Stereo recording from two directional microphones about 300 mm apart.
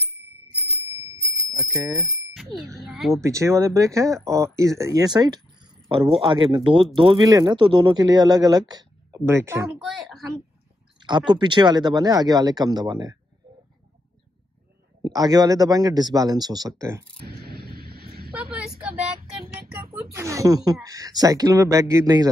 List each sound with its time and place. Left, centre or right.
1.2 s speech: centre
11.0 s speech: centre
15.0 s speech: centre
17.3 s honk: right
19.9 s speech: centre